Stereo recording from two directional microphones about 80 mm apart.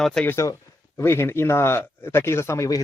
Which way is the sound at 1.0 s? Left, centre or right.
Left.